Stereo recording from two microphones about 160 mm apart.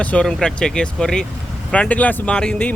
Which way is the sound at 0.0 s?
5° left (ahead or behind).